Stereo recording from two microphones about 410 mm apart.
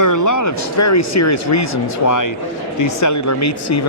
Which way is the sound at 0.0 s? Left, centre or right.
Left.